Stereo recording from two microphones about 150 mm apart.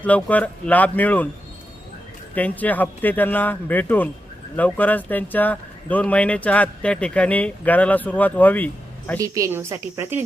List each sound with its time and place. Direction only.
0.0 s speech: 10° left (ahead or behind)
2.3 s speech: 10° left (ahead or behind)
9.2 s a woman's voice: 20° right (ahead or behind)